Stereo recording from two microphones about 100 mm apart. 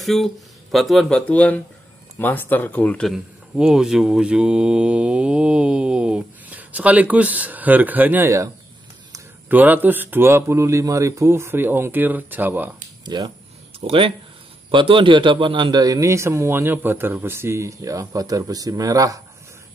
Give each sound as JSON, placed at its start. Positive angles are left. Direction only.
{"t": 0.0, "sound": "speech", "side_deg": 0}
{"t": 3.1, "sound": "speech", "side_deg": -5}
{"t": 9.5, "sound": "speech", "side_deg": -15}
{"t": 13.0, "sound": "speech", "side_deg": -45}
{"t": 13.7, "sound": "speech", "side_deg": -70}
{"t": 14.7, "sound": "a man's voice", "side_deg": -60}